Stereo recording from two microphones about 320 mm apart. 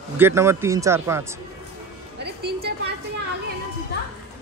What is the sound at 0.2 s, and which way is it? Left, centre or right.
A man's voice, centre.